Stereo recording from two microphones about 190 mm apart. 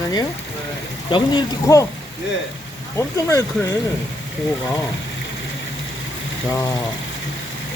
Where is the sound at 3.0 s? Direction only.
15° left (ahead or behind).